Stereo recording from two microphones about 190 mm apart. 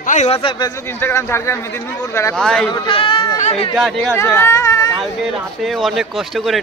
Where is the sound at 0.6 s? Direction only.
15° left (ahead or behind).